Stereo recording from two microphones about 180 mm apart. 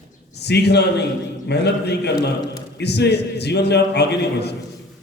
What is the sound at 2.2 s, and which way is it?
Speech, 20° left (ahead or behind).